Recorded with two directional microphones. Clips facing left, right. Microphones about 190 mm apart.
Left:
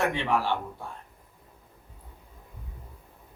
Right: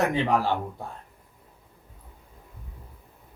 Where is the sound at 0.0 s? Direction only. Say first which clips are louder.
Right 3 dB; 40° right (ahead or behind).